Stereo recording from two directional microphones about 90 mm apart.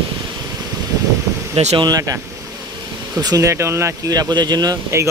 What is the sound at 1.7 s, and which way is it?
Speech, 45° right (ahead or behind).